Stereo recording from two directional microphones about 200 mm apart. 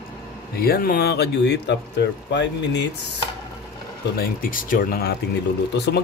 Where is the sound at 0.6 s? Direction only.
50° left (ahead or behind).